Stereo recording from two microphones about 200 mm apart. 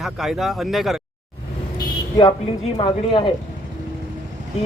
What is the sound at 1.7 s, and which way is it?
Vehicle, 20° left (ahead or behind).